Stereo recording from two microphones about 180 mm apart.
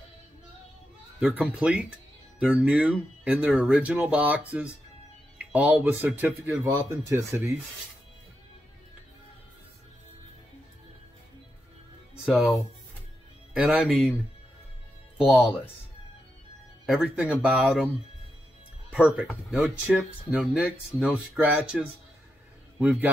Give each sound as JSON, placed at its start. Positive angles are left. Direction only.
{"t": 1.2, "sound": "speech", "side_deg": -5}
{"t": 12.3, "sound": "speech", "side_deg": 0}
{"t": 15.1, "sound": "speech", "side_deg": 0}
{"t": 16.8, "sound": "speech", "side_deg": -5}
{"t": 18.9, "sound": "speech", "side_deg": -10}